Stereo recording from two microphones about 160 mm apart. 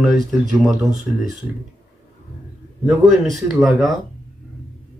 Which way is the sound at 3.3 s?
Centre (ahead or behind).